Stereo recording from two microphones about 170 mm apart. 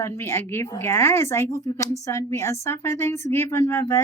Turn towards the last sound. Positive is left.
turn(degrees=15)  # may be behind; listen again after turning